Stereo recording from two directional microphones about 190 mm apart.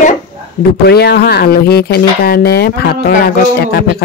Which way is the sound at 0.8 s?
55° left (ahead or behind).